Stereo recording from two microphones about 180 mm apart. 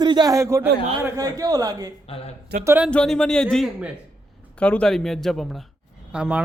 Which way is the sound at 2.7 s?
10° right (ahead or behind).